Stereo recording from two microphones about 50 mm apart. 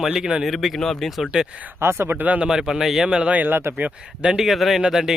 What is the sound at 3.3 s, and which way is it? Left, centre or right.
Speech, right.